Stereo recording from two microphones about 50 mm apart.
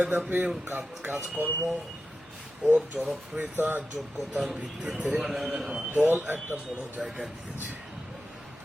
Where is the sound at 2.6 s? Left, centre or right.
Right.